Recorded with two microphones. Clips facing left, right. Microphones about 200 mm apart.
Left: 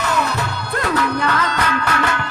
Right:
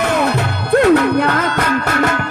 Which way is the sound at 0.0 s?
55° right (ahead or behind).